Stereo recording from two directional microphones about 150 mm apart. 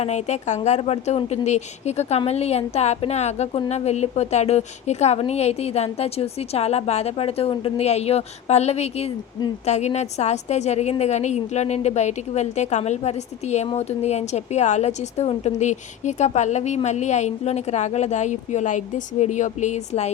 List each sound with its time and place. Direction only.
0.0 s a woman's voice: 50° left (ahead or behind)